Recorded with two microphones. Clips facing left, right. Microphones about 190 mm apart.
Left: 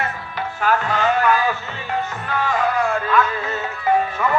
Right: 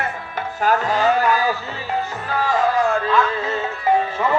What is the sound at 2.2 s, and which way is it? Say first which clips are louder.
Music: right 1 dB; 35° right (ahead or behind).